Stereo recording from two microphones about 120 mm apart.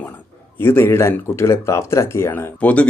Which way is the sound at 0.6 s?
20° left (ahead or behind).